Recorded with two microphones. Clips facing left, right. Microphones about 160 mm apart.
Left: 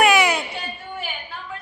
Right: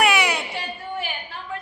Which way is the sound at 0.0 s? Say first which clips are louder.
Left 3 dB; 45° left (ahead or behind).